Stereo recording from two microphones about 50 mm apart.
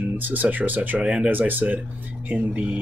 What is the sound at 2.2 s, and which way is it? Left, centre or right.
Speech, right.